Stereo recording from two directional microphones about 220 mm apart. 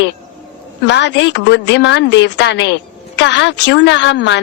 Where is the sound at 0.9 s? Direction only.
55° left (ahead or behind).